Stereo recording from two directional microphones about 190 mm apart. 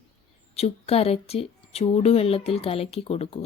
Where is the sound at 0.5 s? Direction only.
35° left (ahead or behind).